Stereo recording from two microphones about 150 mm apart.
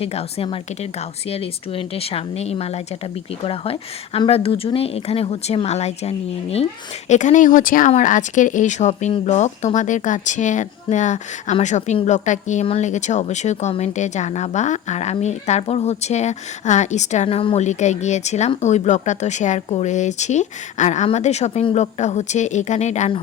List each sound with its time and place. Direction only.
0.0 s speech: 40° left (ahead or behind)
7.1 s speech: 55° left (ahead or behind)